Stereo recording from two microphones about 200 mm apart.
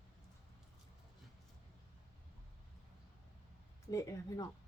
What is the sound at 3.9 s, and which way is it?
Speech, 15° left (ahead or behind).